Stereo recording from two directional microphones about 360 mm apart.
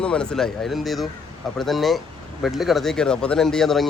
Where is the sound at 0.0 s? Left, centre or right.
Centre.